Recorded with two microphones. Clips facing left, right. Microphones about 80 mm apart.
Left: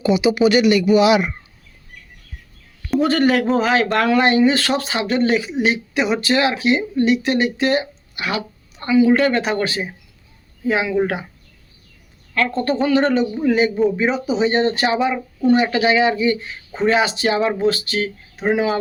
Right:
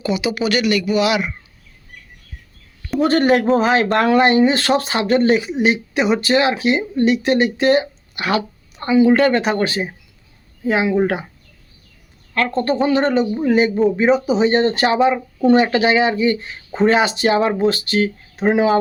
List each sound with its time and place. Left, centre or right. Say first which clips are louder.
0.0 s speech: left 5 dB; left
3.0 s speech: right 2 dB; right
8.1 s speech: right 4 dB; right
9.4 s speech: right 2 dB; right
12.3 s speech: right 1 dB; right
12.9 s speech: even; right
13.4 s speech: right 2 dB; right